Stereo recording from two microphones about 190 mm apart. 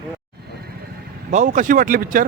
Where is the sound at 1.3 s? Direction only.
40° right (ahead or behind).